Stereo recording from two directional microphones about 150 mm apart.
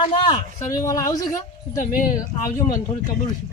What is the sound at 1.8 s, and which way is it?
Speech, 65° left (ahead or behind).